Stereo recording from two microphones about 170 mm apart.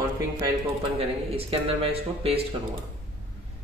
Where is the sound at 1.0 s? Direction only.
35° right (ahead or behind).